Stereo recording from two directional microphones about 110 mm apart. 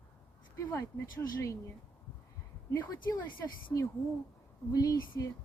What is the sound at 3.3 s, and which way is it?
Speech, 40° left (ahead or behind).